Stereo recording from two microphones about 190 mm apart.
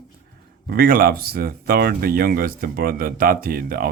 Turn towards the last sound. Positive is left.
turn(degrees=-50)  # may be behind; listen again after turning